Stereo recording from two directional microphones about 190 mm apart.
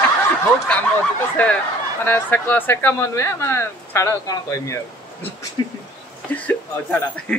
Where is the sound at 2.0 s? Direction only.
10° left (ahead or behind).